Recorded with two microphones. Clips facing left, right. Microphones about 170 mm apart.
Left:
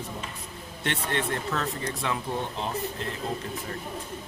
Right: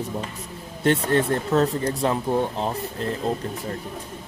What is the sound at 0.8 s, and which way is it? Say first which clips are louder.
Speech: right 10 dB; 40° right (ahead or behind).